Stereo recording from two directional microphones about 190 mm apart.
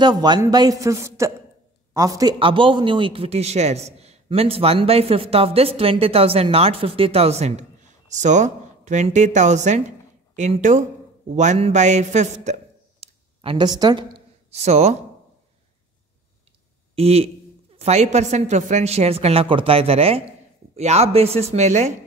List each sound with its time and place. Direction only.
0.0 s a man's voice: 20° right (ahead or behind); by 12.5 s 35° right (ahead or behind)
13.0 s a sound: 30° right (ahead or behind)
14.5 s a man's voice: 35° right (ahead or behind)
16.9 s a man's voice: 30° right (ahead or behind)